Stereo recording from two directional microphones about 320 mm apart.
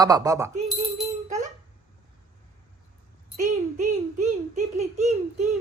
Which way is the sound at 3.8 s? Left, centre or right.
Right.